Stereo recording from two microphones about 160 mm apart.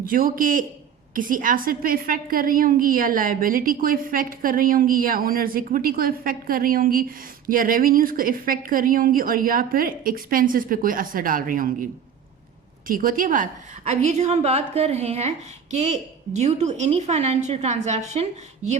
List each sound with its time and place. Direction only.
0.0 s a woman's voice: 60° right (ahead or behind)
12.9 s a woman's voice: 60° right (ahead or behind); by 18.8 s 45° right (ahead or behind)